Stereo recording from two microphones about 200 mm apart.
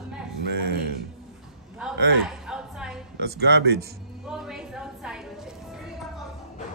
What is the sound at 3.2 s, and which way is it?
Speech, 55° right (ahead or behind).